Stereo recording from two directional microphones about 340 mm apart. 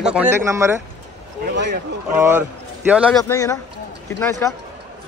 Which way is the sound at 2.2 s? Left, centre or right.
Centre.